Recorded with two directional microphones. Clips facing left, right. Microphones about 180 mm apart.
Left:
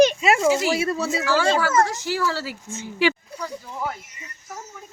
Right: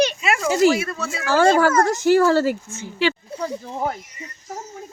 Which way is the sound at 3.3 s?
25° right (ahead or behind).